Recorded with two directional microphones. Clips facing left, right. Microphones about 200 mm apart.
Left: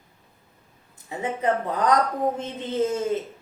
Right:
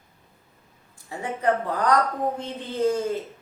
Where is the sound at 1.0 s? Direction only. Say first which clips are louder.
Even; 20° left (ahead or behind).